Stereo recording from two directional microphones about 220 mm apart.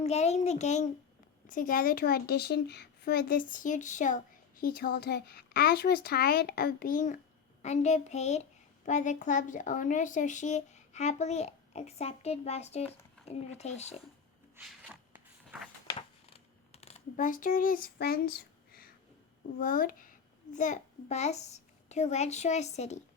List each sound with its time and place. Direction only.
0.0 s a woman's voice: 30° left (ahead or behind)
14.5 s a sound: 5° right (ahead or behind)
15.9 s scissors: 25° left (ahead or behind); by 18.9 s 45° left (ahead or behind)
19.5 s a child's voice: 40° left (ahead or behind)